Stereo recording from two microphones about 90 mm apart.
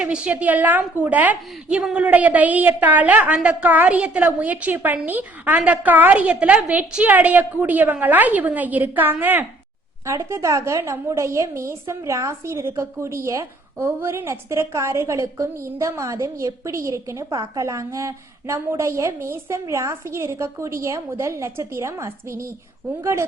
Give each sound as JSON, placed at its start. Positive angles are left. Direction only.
{"t": 0.0, "sound": "a woman's voice", "side_deg": -15}
{"t": 10.1, "sound": "a woman's voice", "side_deg": -30}
{"t": 17.3, "sound": "a woman's voice", "side_deg": -50}
{"t": 17.7, "sound": "a woman's voice", "side_deg": -35}